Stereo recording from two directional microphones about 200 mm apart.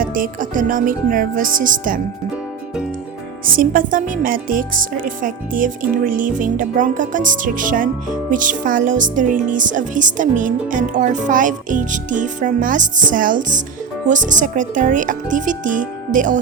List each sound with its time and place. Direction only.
0.0 s speech: 45° right (ahead or behind)
3.4 s speech: 45° right (ahead or behind)